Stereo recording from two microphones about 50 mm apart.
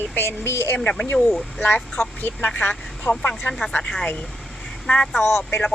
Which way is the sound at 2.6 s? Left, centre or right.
Left.